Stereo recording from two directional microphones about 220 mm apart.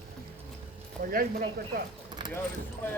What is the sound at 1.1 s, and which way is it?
Speech, 40° right (ahead or behind).